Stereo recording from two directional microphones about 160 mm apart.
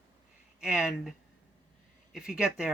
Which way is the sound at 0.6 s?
5° right (ahead or behind).